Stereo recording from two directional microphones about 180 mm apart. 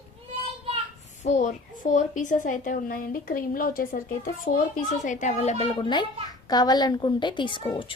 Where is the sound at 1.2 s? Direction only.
40° left (ahead or behind).